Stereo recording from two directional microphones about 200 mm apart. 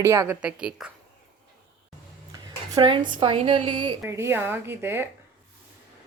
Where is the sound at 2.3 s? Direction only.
20° right (ahead or behind).